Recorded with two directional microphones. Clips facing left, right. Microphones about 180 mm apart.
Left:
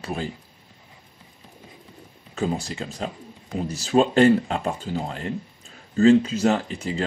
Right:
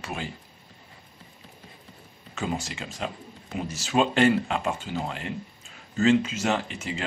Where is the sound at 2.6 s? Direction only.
35° left (ahead or behind).